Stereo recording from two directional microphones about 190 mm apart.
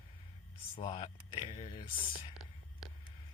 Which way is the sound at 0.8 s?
25° left (ahead or behind).